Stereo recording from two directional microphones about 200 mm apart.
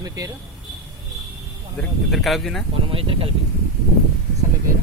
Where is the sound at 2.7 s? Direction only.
30° right (ahead or behind).